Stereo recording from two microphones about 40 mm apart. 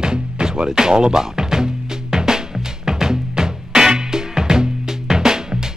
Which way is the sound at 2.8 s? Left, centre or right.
Centre.